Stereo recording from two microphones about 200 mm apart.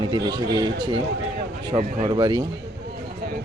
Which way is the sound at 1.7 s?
25° right (ahead or behind).